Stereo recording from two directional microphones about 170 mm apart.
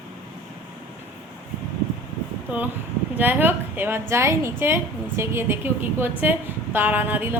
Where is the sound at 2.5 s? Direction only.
10° right (ahead or behind).